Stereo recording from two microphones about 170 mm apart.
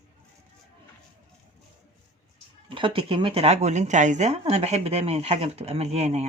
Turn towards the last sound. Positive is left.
turn(degrees=-40)  # may be behind; listen again after turning